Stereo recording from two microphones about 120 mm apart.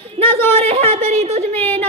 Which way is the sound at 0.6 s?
60° right (ahead or behind).